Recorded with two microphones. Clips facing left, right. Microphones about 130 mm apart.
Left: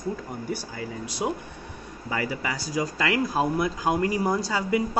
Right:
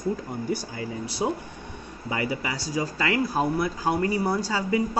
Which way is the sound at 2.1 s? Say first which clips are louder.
Right 1 dB; 15° right (ahead or behind).